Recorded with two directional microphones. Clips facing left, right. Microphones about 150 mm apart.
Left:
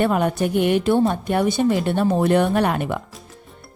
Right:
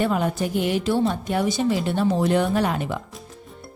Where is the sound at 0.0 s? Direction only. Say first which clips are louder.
Left 3 dB; 60° left (ahead or behind).